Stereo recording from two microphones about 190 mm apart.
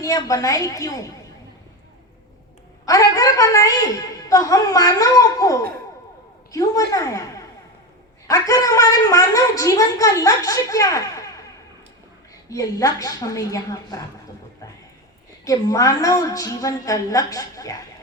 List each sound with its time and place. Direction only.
0.0 s a woman's voice: 15° left (ahead or behind)
2.8 s a woman's voice: 15° left (ahead or behind)
12.5 s a woman's voice: 20° left (ahead or behind)
15.4 s a woman's voice: 15° left (ahead or behind)